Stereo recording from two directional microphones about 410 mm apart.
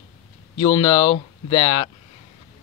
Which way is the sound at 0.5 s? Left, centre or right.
Centre.